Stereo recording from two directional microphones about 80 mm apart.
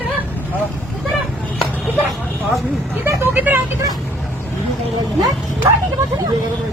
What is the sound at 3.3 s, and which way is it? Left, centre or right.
Speech, right.